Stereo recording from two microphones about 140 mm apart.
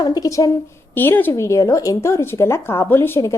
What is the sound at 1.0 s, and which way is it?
A woman's voice, 15° left (ahead or behind).